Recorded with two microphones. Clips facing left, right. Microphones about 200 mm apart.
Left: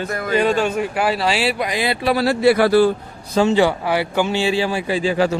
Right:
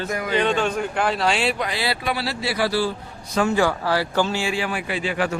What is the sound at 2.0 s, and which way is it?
Speech, 45° left (ahead or behind).